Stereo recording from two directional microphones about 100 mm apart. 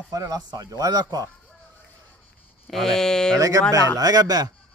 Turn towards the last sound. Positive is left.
turn(degrees=-40)  # may be behind; listen again after turning